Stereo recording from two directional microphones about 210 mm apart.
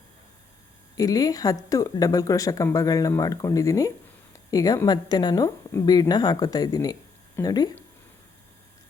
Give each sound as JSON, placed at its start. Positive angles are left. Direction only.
{"t": 0.9, "sound": "a woman's voice", "side_deg": 15}